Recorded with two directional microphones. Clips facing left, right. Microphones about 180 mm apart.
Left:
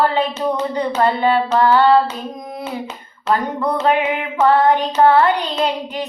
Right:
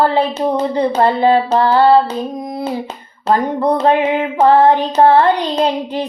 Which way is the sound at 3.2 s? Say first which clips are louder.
Right 4 dB; 35° right (ahead or behind).